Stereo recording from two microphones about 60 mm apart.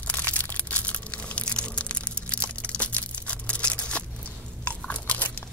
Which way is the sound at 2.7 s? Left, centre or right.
Left.